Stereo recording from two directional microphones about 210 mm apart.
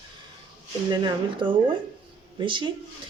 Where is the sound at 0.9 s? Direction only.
20° right (ahead or behind).